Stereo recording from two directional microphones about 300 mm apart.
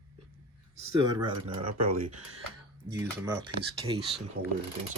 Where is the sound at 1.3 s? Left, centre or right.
Right.